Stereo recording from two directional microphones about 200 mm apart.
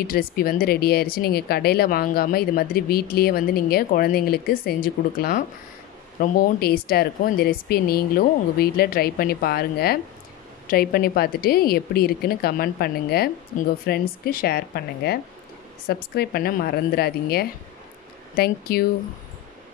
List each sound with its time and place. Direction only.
0.0 s speech: 50° left (ahead or behind)
15.9 s speech: 50° left (ahead or behind)